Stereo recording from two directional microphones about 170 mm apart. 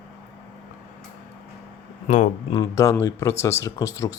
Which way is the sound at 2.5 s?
20° left (ahead or behind).